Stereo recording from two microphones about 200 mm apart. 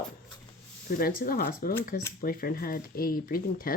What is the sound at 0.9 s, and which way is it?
Speech, 45° left (ahead or behind).